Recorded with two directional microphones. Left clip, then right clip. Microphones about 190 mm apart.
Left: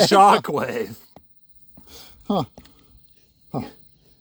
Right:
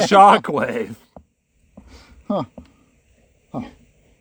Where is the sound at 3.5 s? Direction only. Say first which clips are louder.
Left 1 dB; 45° left (ahead or behind).